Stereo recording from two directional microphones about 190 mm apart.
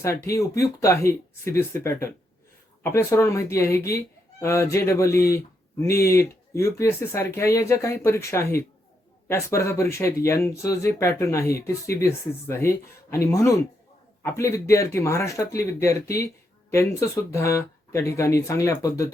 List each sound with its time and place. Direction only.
0.0 s speech: 15° left (ahead or behind)